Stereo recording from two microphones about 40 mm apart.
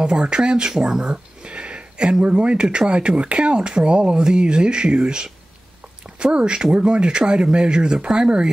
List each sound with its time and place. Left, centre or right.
0.1 s speech: right
1.1 s a sound: right
2.2 s speech: right